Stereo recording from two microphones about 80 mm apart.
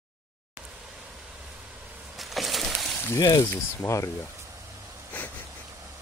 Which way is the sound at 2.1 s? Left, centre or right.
Centre.